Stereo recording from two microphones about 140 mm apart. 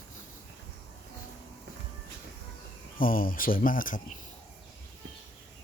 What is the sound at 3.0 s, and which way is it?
Speech, 85° left.